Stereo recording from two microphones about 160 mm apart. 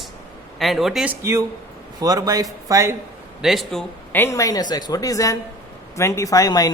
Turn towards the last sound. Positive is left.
turn(degrees=25)  # may be behind; listen again after turning